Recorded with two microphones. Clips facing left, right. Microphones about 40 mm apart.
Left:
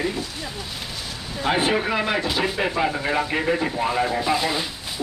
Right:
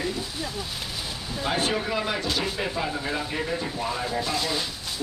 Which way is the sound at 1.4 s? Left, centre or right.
Left.